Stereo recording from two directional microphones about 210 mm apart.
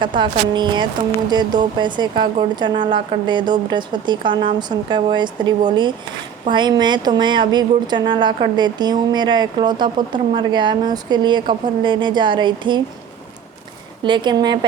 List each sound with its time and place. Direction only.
0.0 s speech: 20° right (ahead or behind)
14.0 s speech: 20° right (ahead or behind)